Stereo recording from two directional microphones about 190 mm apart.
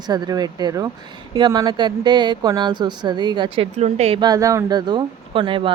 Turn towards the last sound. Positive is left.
turn(degrees=-25)  # may be behind; listen again after turning